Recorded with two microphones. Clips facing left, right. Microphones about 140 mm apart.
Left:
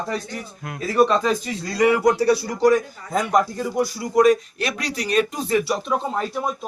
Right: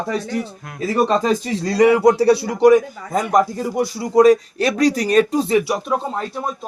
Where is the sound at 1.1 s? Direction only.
30° right (ahead or behind).